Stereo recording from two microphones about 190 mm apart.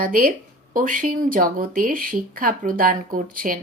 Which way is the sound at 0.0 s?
50° right (ahead or behind).